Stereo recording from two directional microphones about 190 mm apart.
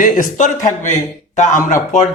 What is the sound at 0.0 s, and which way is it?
A man's voice, 45° left (ahead or behind).